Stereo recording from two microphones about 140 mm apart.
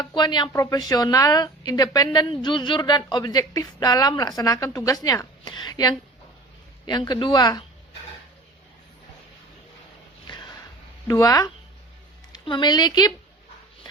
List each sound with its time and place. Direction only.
0.0 s speech: 30° left (ahead or behind)
11.1 s speech: 25° left (ahead or behind)